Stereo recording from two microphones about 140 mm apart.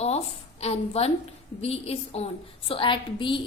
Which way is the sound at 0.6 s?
45° left (ahead or behind).